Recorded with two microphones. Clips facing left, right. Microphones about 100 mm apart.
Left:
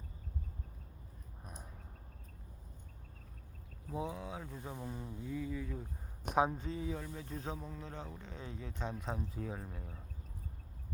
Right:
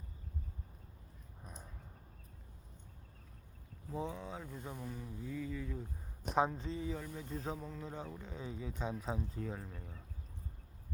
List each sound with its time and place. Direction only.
3.9 s speech: 5° left (ahead or behind)
4.8 s speech: 25° left (ahead or behind)
5.2 s speech: 10° left (ahead or behind)
7.9 s speech: 5° right (ahead or behind)